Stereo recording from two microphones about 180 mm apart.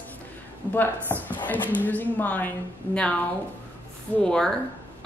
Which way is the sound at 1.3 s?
10° left (ahead or behind).